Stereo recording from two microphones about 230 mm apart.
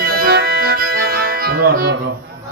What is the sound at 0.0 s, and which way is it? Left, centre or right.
Music, right.